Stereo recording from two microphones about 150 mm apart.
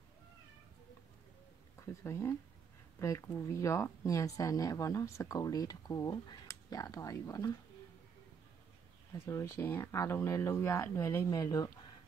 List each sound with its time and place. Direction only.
1.8 s speech: 20° left (ahead or behind)
9.3 s speech: 20° left (ahead or behind)